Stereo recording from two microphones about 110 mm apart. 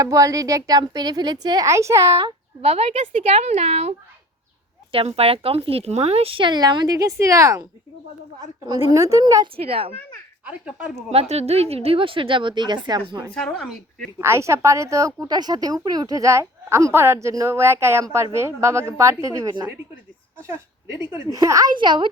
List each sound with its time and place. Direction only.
0.0 s a woman's voice: 30° right (ahead or behind)
2.6 s a woman's voice: 65° right (ahead or behind)
4.9 s speech: 65° right (ahead or behind); by 7.7 s 30° right (ahead or behind)
8.8 s a woman's voice: 30° right (ahead or behind)
9.6 s speech: 60° right (ahead or behind)
10.4 s speech: 10° right (ahead or behind)
11.1 s speech: 70° right (ahead or behind); by 13.2 s 45° right (ahead or behind)
13.3 s speech: 5° left (ahead or behind)
14.2 s a woman's voice: 25° right (ahead or behind)
21.2 s a woman's voice: 30° right (ahead or behind)
21.7 s speech: 45° right (ahead or behind)